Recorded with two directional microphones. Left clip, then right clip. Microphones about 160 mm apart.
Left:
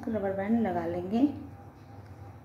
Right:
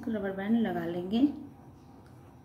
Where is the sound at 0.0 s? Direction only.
25° right (ahead or behind).